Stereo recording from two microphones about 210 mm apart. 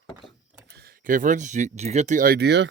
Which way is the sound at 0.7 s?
40° right (ahead or behind).